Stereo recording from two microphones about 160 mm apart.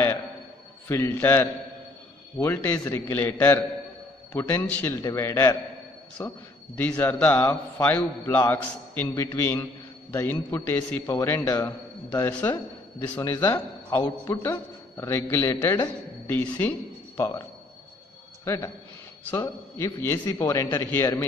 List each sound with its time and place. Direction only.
0.8 s a man's voice: 15° left (ahead or behind)
6.8 s a man's voice: 10° left (ahead or behind)
18.4 s a man's voice: 15° left (ahead or behind)